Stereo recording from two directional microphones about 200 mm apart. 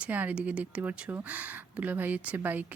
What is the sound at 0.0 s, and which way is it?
Speech, 5° right (ahead or behind).